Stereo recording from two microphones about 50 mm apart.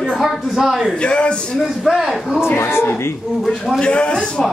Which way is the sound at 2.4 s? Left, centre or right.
Left.